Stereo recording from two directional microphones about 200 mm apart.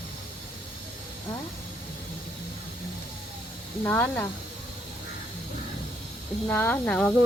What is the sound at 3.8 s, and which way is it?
Speech, 10° left (ahead or behind).